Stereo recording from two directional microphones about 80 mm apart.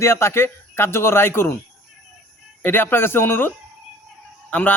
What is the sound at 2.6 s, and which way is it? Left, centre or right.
A man's voice, left.